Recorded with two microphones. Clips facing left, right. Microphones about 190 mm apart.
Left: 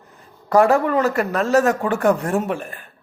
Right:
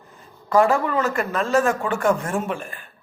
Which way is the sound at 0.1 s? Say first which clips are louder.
Left 3 dB; 40° left (ahead or behind).